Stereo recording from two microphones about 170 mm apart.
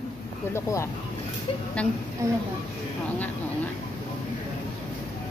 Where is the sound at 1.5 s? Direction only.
35° left (ahead or behind).